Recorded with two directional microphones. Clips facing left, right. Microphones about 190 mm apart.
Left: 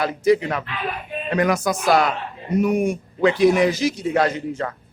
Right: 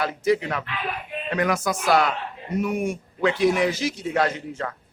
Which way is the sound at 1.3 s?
40° left (ahead or behind).